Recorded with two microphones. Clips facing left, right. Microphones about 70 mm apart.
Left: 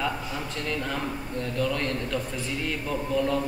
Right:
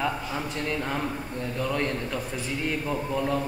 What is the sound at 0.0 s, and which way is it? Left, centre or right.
A man's voice, centre.